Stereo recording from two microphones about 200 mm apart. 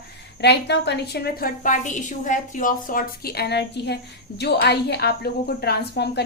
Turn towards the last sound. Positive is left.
turn(degrees=55)  # may be behind; listen again after turning